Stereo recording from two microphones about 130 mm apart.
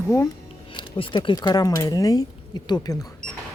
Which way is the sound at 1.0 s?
35° left (ahead or behind).